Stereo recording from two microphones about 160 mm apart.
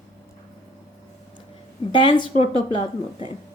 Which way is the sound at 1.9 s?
30° left (ahead or behind).